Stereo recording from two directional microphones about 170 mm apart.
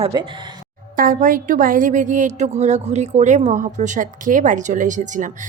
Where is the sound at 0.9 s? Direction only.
55° right (ahead or behind).